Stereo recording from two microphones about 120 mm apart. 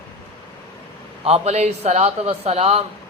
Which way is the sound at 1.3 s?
60° right (ahead or behind).